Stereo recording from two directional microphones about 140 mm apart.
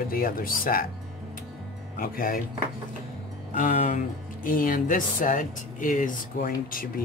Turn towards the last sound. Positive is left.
turn(degrees=70)  # may be behind; listen again after turning